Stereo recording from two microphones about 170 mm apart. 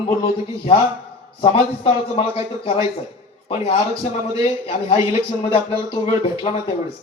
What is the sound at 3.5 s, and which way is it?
Speech, 35° left (ahead or behind).